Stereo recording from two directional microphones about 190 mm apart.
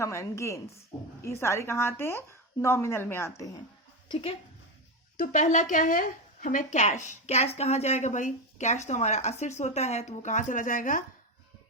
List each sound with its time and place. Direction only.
0.0 s speech: 15° left (ahead or behind)
4.1 s a woman's voice: 30° left (ahead or behind)
5.1 s speech: 45° left (ahead or behind)